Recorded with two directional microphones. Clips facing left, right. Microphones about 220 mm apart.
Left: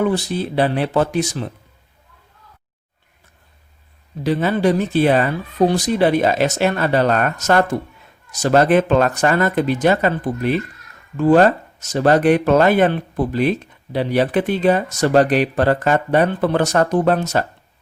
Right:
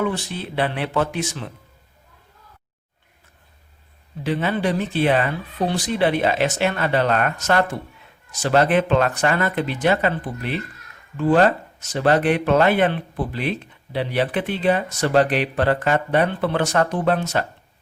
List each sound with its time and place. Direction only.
0.0 s speech: 35° left (ahead or behind)
4.2 s speech: 40° left (ahead or behind)